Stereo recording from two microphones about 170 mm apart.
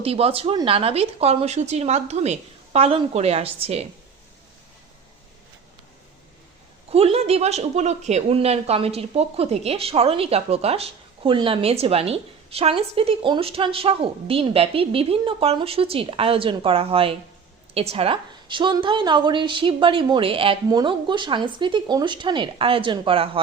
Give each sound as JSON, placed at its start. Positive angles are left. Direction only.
{"t": 0.0, "sound": "speech", "side_deg": -35}
{"t": 6.9, "sound": "a woman's voice", "side_deg": -35}